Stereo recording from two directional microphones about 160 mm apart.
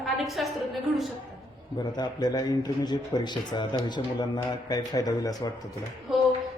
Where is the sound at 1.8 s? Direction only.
25° left (ahead or behind).